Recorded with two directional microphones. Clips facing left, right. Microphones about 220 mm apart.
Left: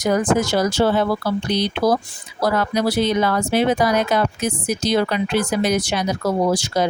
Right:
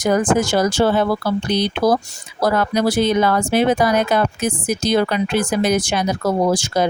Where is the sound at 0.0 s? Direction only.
50° right (ahead or behind).